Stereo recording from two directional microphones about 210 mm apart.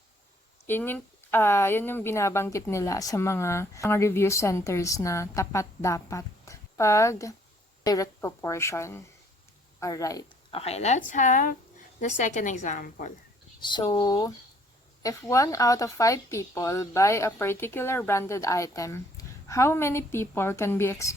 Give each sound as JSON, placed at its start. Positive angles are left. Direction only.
{"t": 0.7, "sound": "speech", "side_deg": 10}
{"t": 10.6, "sound": "a woman's voice", "side_deg": 30}
{"t": 13.6, "sound": "speech", "side_deg": 20}